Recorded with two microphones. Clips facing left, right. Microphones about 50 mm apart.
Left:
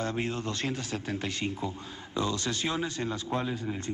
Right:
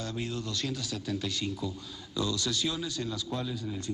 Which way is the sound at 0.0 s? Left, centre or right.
Left.